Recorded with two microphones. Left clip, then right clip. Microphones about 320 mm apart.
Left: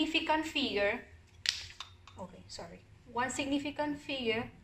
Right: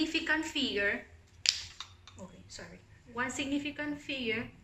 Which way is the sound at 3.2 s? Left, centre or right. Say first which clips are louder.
Left 1 dB; centre.